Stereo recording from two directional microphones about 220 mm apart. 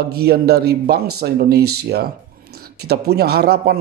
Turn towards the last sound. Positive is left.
turn(degrees=-45)  # may be behind; listen again after turning